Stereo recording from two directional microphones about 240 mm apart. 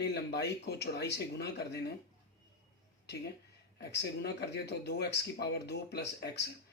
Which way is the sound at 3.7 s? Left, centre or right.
Left.